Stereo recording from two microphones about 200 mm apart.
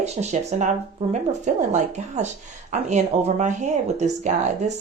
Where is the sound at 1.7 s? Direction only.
35° right (ahead or behind).